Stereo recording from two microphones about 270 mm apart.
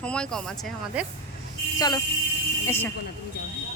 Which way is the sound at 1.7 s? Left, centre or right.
Centre.